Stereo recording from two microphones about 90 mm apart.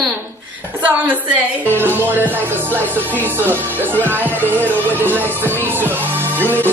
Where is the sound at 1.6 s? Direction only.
20° right (ahead or behind).